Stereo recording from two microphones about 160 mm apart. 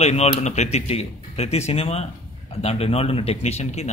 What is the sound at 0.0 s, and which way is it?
A man's voice, 40° left (ahead or behind).